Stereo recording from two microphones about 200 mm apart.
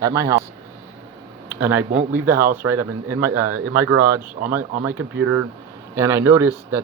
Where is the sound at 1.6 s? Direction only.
10° right (ahead or behind).